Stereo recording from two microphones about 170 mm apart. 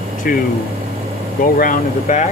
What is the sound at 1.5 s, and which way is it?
Speech, 55° left (ahead or behind).